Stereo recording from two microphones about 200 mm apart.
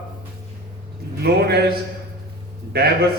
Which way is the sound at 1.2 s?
55° right (ahead or behind).